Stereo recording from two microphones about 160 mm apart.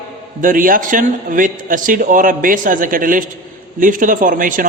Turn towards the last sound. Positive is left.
turn(degrees=-55)  # may be behind; listen again after turning